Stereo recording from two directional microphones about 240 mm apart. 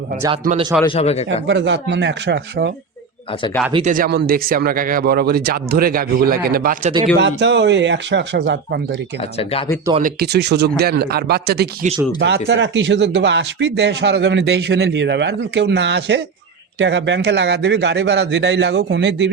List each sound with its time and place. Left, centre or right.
0.9 s speech: left
1.5 s speech: right
3.7 s speech: right
7.2 s speech: right
9.4 s speech: left
10.0 s speech: right